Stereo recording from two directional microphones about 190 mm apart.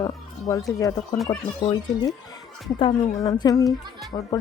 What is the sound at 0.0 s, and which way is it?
Music, 15° left (ahead or behind).